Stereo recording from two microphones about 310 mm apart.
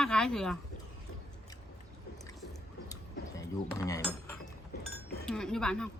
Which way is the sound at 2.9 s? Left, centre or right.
Centre.